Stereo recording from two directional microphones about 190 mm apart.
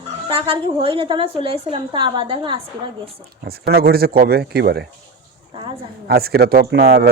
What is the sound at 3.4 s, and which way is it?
Speech, 55° right (ahead or behind).